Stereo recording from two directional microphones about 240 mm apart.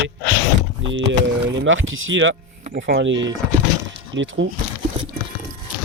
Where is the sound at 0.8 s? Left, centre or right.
Right.